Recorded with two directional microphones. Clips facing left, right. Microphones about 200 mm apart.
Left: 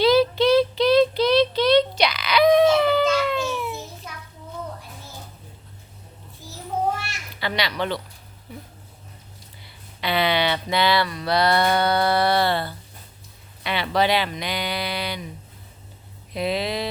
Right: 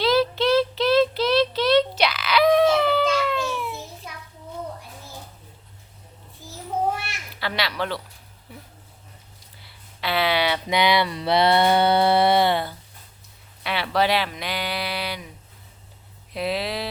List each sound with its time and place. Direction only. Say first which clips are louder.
0.0 s child singing: left 3 dB; centre (ahead or behind)
7.3 s speech: left 1 dB; centre (ahead or behind)
9.6 s speech: left 1 dB; centre (ahead or behind)
13.7 s speech: left 1 dB; 5° right (ahead or behind)
16.3 s speech: left 2 dB; 5° right (ahead or behind)